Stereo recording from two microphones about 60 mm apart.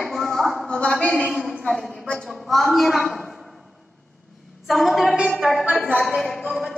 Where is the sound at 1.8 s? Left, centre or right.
Centre.